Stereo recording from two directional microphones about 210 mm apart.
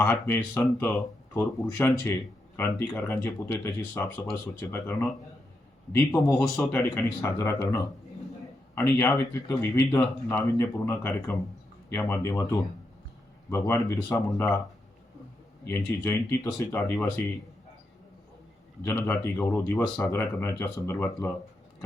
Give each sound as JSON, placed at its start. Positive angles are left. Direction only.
{"t": 0.0, "sound": "speech", "side_deg": 10}
{"t": 15.8, "sound": "speech", "side_deg": 10}
{"t": 18.8, "sound": "speech", "side_deg": 10}